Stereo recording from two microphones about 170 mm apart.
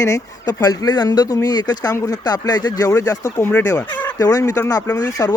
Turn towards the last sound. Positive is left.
turn(degrees=20)  # may be behind; listen again after turning